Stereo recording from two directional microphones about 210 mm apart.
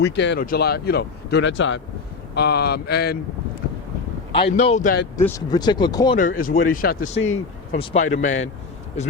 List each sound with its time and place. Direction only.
0.0 s speech: 55° left (ahead or behind)
2.3 s speech: 50° left (ahead or behind)
4.3 s speech: 25° left (ahead or behind)
5.1 s speech: 15° left (ahead or behind)
6.1 s speech: 40° left (ahead or behind)